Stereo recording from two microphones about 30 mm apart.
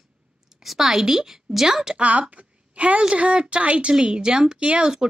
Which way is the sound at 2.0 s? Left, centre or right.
Right.